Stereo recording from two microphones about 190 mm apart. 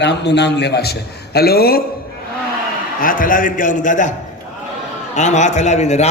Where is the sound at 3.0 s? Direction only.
45° left (ahead or behind).